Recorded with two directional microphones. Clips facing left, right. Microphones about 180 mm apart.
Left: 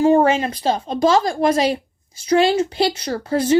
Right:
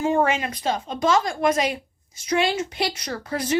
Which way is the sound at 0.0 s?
35° left (ahead or behind).